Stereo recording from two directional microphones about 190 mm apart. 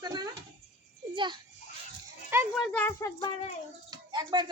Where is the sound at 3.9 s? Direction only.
20° right (ahead or behind).